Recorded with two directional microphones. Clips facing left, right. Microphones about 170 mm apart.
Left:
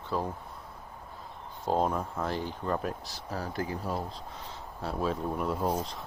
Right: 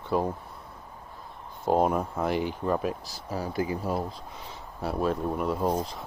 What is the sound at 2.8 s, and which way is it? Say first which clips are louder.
Speech: right 4 dB; centre (ahead or behind).